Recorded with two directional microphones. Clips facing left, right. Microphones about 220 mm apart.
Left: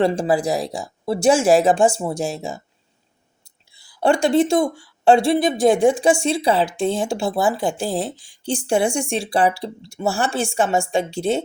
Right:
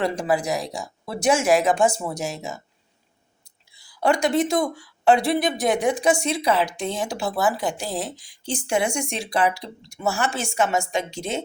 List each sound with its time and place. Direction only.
0.0 s speech: 30° left (ahead or behind)